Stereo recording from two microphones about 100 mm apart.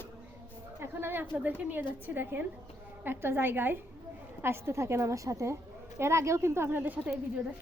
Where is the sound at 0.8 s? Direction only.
20° right (ahead or behind).